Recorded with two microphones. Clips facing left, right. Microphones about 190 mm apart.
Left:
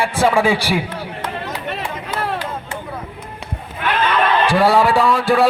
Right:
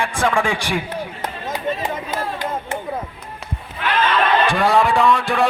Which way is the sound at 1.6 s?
70° left (ahead or behind).